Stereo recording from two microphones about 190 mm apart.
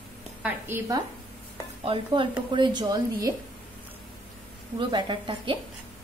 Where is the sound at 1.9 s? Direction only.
25° right (ahead or behind).